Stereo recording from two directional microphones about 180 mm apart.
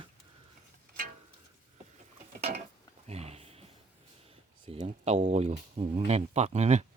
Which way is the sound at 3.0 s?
35° right (ahead or behind).